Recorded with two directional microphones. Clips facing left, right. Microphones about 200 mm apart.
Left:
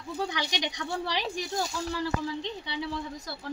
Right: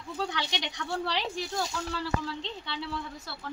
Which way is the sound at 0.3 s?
15° left (ahead or behind).